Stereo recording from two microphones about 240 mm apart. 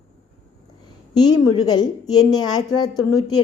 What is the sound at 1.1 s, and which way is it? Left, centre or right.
A woman's voice, centre.